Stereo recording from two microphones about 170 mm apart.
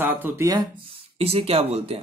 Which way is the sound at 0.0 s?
15° right (ahead or behind).